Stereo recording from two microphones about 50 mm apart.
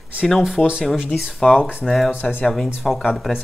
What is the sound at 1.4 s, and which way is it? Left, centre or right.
Speech, centre.